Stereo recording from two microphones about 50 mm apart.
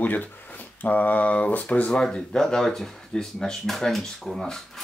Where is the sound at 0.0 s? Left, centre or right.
Left.